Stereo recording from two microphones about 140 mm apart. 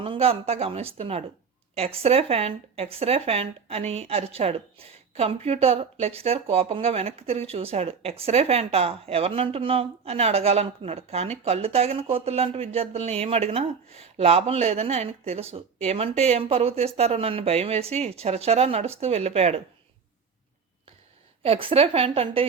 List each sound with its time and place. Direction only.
0.0 s speech: 45° right (ahead or behind)
21.4 s speech: 45° right (ahead or behind)